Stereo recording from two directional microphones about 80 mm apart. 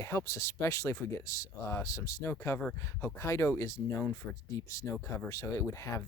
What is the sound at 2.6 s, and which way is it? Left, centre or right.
Speech, centre.